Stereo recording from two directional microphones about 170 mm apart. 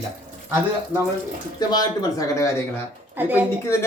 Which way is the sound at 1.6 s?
25° left (ahead or behind).